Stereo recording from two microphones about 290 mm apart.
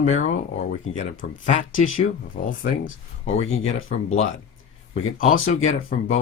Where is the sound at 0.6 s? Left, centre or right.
Left.